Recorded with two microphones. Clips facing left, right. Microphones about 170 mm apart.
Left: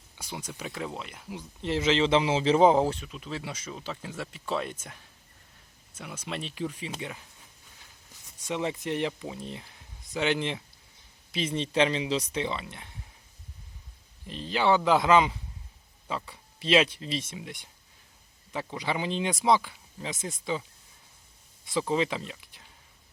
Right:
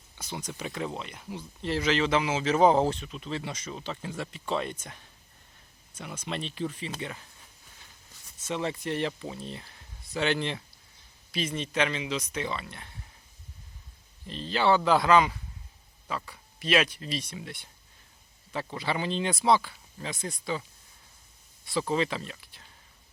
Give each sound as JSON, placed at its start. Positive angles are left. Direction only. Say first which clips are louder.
{"t": 0.2, "sound": "speech", "louder": "right 1 dB", "side_deg": 10}
{"t": 1.4, "sound": "speech", "louder": "left 1 dB", "side_deg": 20}
{"t": 8.4, "sound": "speech", "louder": "left 1 dB", "side_deg": 15}
{"t": 14.3, "sound": "speech", "louder": "even", "side_deg": 15}
{"t": 21.6, "sound": "speech", "louder": "left 1 dB", "side_deg": 20}